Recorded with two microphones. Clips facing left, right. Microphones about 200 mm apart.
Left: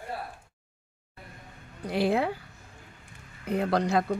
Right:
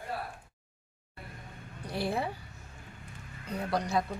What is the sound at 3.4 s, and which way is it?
Speech, 70° left (ahead or behind).